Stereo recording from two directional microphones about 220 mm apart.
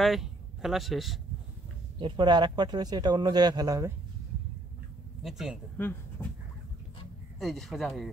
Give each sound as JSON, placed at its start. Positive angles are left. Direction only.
{"t": 0.0, "sound": "speech", "side_deg": 0}
{"t": 2.0, "sound": "speech", "side_deg": -20}
{"t": 5.2, "sound": "speech", "side_deg": 0}
{"t": 7.3, "sound": "speech", "side_deg": 0}